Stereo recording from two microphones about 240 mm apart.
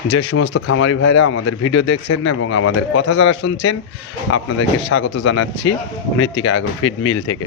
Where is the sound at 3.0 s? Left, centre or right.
Left.